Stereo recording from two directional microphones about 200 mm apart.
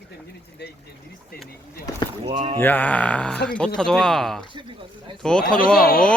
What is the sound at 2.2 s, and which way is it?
Speech, 25° right (ahead or behind).